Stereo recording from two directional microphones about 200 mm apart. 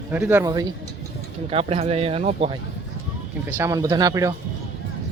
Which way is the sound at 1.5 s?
30° right (ahead or behind).